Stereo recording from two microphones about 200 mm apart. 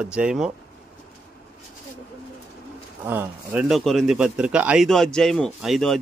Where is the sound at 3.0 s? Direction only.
10° right (ahead or behind).